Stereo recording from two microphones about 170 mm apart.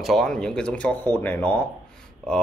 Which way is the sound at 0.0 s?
Centre (ahead or behind).